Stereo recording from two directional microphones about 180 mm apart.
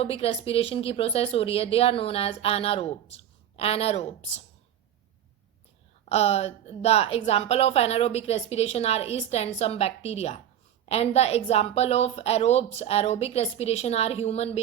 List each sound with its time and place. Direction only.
0.0 s a woman's voice: 35° left (ahead or behind)
6.1 s a woman's voice: 35° left (ahead or behind)